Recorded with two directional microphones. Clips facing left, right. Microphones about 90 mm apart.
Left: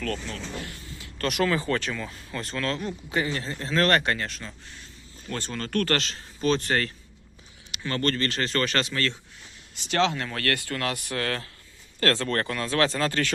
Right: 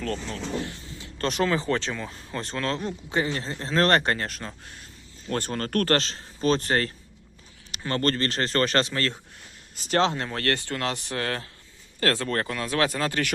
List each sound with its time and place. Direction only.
0.0 s speech: 25° right (ahead or behind)
2.0 s speech: 35° right (ahead or behind); by 13.3 s 15° right (ahead or behind)